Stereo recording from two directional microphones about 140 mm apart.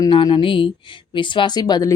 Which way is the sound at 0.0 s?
35° left (ahead or behind).